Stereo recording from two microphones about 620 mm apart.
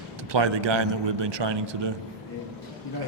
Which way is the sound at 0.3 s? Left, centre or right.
Right.